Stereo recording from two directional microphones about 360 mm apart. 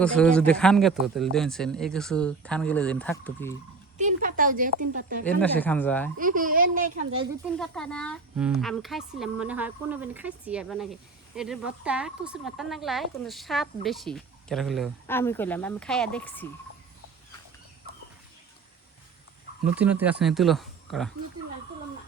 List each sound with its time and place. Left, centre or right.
0.0 s speech: centre
3.9 s a woman's voice: right
5.2 s speech: centre
6.1 s a woman's voice: right
7.6 s speech: centre
19.6 s speech: centre